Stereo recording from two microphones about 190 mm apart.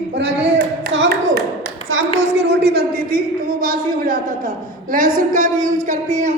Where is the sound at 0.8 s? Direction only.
70° right (ahead or behind).